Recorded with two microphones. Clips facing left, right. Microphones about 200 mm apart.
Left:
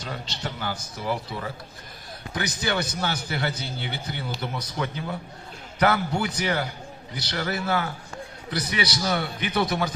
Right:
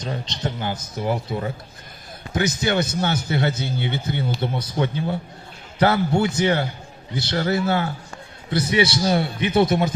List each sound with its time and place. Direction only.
0.0 s a man's voice: 20° right (ahead or behind)